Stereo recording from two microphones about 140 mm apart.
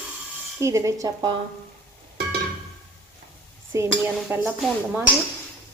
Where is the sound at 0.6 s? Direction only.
20° right (ahead or behind).